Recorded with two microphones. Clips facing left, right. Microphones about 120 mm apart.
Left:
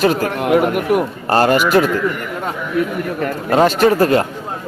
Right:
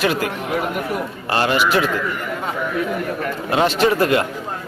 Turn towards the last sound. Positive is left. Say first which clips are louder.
# left 4 dB
turn(degrees=35)  # may be behind; listen again after turning